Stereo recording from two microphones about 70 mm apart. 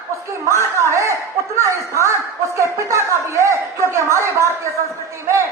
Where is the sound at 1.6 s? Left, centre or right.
Right.